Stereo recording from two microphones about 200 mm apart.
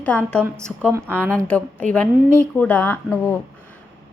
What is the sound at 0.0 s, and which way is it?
Speech, 5° left (ahead or behind).